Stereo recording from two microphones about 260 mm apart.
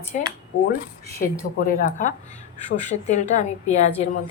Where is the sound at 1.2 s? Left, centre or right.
Left.